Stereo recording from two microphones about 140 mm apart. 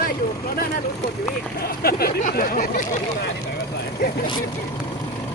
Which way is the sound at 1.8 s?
90° left.